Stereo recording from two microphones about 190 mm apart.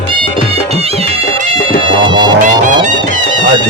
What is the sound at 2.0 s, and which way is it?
Music, 25° right (ahead or behind).